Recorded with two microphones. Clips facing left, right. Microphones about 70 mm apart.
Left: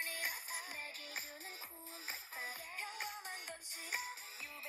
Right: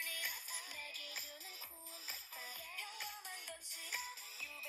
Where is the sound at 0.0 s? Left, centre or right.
Left.